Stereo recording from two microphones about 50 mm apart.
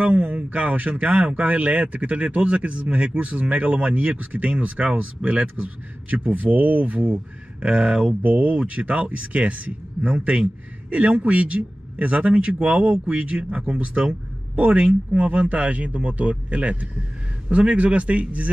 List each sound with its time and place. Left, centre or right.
0.0 s speech: right
8.2 s speech: right